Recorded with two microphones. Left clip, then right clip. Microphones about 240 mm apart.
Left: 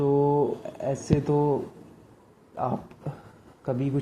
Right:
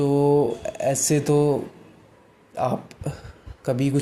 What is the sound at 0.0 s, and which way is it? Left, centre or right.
Music, right.